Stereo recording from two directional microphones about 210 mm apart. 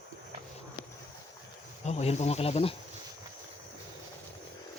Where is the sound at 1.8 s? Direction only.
30° left (ahead or behind).